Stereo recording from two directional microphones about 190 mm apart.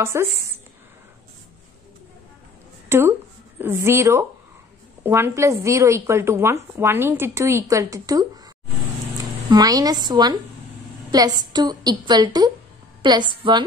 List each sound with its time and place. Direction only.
0.0 s a woman's voice: 15° right (ahead or behind)
2.9 s a woman's voice: 15° right (ahead or behind)
9.5 s a woman's voice: 20° right (ahead or behind)